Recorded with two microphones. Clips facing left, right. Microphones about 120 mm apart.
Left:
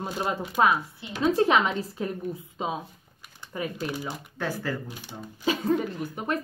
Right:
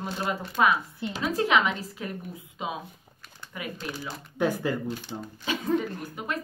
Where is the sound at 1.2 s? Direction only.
30° left (ahead or behind).